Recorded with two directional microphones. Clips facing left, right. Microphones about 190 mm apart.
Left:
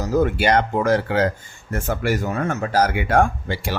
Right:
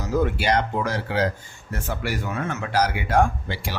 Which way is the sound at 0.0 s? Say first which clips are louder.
Left 4 dB; 45° left (ahead or behind).